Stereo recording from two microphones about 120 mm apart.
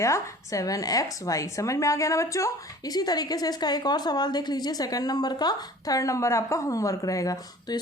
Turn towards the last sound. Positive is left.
turn(degrees=30)  # may be behind; listen again after turning